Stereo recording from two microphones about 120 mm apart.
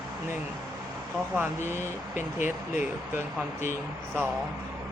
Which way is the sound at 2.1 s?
90° left.